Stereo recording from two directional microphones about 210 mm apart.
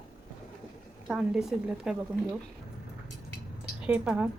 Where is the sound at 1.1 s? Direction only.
5° right (ahead or behind).